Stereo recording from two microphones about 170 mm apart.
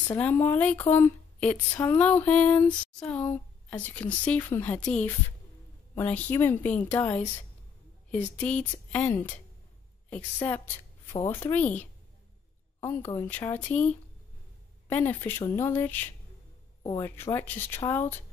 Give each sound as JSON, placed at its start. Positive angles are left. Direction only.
{"t": 0.1, "sound": "speech", "side_deg": 10}
{"t": 5.9, "sound": "speech", "side_deg": 10}
{"t": 8.4, "sound": "a woman's voice", "side_deg": 10}
{"t": 12.8, "sound": "speech", "side_deg": 15}
{"t": 14.9, "sound": "speech", "side_deg": 10}